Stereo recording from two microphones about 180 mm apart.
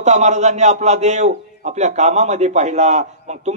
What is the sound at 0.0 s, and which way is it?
A man's voice, 40° right (ahead or behind).